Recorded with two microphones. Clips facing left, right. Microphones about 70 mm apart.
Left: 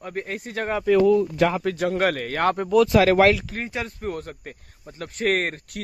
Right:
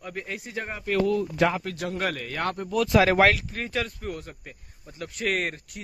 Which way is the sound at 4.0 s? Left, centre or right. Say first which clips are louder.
Left 5 dB; left.